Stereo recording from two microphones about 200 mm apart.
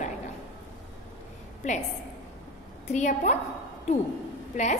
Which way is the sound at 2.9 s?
35° left (ahead or behind).